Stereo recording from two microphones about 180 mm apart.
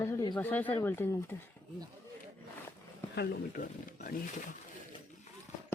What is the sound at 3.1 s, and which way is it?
Speech, 60° left (ahead or behind).